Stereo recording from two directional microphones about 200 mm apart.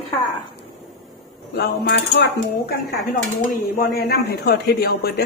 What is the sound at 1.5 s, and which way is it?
Cutlery, 55° left (ahead or behind).